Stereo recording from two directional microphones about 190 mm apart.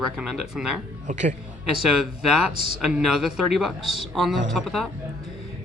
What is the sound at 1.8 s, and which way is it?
Speech, centre (ahead or behind).